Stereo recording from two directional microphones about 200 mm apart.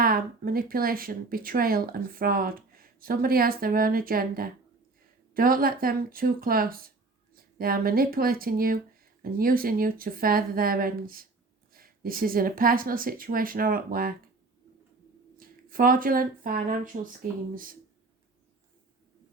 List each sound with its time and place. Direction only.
0.0 s speech: 45° right (ahead or behind)
15.4 s speech: 45° right (ahead or behind)